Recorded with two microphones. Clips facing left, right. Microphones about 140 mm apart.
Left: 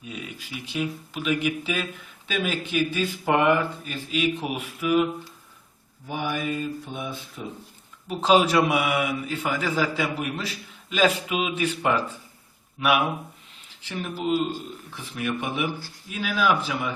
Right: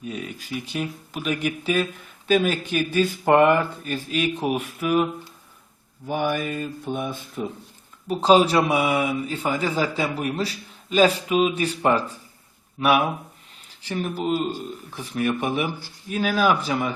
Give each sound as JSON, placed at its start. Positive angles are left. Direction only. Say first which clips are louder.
{"t": 0.0, "sound": "speech", "louder": "right 5 dB", "side_deg": -45}
{"t": 6.1, "sound": "speech", "louder": "right 4 dB", "side_deg": -50}
{"t": 8.2, "sound": "speech", "louder": "right 2 dB", "side_deg": -35}